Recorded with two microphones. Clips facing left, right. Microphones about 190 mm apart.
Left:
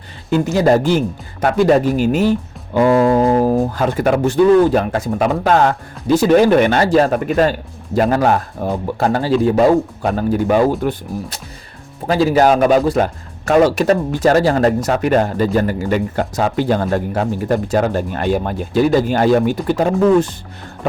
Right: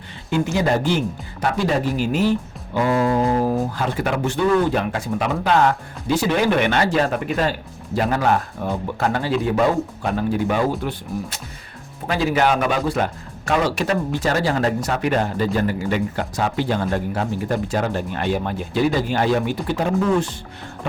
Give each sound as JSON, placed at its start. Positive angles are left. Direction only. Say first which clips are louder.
{"t": 0.3, "sound": "speech", "louder": "left 6 dB", "side_deg": 40}